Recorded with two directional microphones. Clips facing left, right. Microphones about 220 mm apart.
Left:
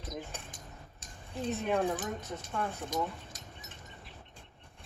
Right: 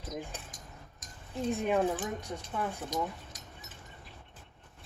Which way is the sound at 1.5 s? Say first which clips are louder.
Right 2 dB; 10° right (ahead or behind).